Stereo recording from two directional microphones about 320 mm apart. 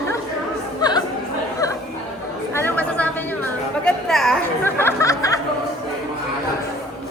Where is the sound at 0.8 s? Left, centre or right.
Centre.